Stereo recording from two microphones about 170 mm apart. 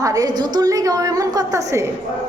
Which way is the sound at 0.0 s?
20° right (ahead or behind).